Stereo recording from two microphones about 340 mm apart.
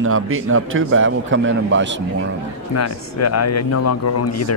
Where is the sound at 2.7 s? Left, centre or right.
Left.